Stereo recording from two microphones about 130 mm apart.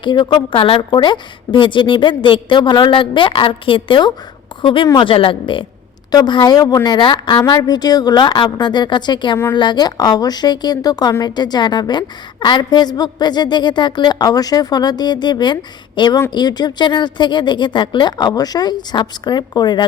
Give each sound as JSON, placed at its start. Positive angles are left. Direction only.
{"t": 0.0, "sound": "a woman's voice", "side_deg": 35}